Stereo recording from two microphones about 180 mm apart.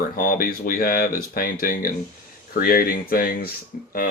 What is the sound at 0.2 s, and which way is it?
Speech, 50° left (ahead or behind).